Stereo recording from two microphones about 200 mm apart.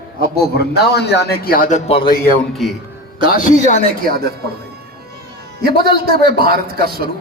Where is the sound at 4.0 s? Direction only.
50° right (ahead or behind).